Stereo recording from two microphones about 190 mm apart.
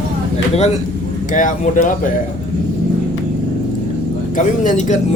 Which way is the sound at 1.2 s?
40° left (ahead or behind).